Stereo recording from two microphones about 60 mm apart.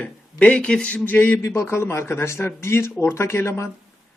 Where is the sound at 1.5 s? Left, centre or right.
Left.